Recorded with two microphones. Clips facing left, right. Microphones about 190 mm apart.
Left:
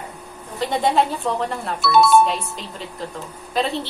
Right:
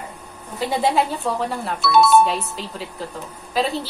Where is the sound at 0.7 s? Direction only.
5° right (ahead or behind).